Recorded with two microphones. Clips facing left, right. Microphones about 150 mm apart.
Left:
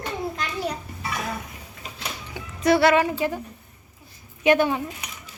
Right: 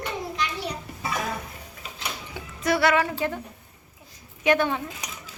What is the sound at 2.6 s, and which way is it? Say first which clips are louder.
Speech: left 4 dB; 30° left (ahead or behind).